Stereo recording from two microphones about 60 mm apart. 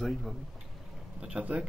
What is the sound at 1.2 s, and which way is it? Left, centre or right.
Speech, centre.